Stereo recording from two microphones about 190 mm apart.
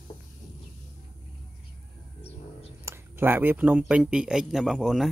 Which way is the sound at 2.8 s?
10° right (ahead or behind).